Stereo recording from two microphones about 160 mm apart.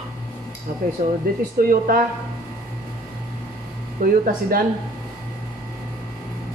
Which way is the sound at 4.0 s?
65° right (ahead or behind).